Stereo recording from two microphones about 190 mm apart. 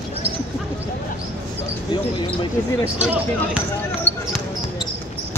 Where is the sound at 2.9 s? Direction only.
5° right (ahead or behind).